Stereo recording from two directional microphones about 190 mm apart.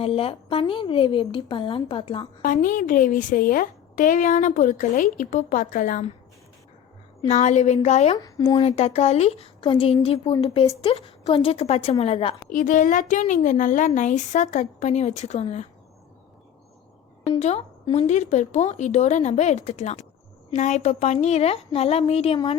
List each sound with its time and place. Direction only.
0.0 s a woman's voice: 30° left (ahead or behind)
2.4 s a woman's voice: 45° left (ahead or behind)
7.3 s a woman's voice: 40° left (ahead or behind)
8.1 s a woman's voice: 20° left (ahead or behind)
12.5 s a woman's voice: 40° left (ahead or behind)
17.2 s a woman's voice: 30° left (ahead or behind)